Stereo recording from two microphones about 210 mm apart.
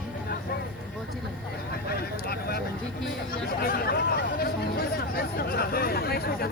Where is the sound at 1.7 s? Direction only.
45° left (ahead or behind).